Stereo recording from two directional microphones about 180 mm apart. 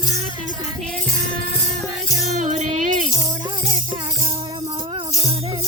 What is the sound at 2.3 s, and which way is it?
Music, 40° right (ahead or behind).